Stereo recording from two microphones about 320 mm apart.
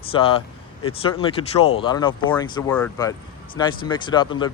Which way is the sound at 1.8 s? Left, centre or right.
Centre.